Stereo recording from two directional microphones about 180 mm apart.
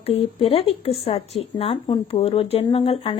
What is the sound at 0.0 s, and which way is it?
Speech, 35° left (ahead or behind).